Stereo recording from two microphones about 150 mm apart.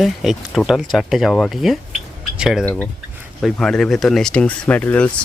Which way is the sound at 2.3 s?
5° right (ahead or behind).